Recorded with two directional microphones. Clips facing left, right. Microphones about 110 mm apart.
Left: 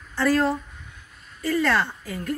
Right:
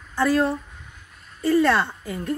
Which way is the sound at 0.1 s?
20° right (ahead or behind).